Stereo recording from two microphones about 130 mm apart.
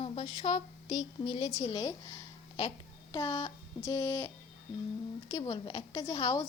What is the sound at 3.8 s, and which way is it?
A woman's voice, 20° left (ahead or behind).